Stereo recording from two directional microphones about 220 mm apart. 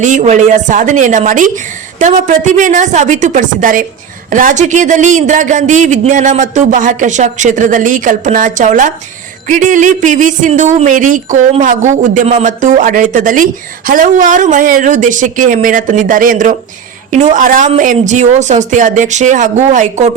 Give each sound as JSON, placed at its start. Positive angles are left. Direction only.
{"t": 0.0, "sound": "speech", "side_deg": -35}